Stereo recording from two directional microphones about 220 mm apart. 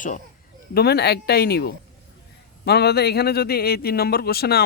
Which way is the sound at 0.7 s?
45° left (ahead or behind).